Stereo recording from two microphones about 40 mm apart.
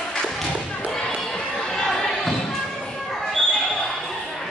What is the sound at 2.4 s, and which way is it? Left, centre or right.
Thump, centre.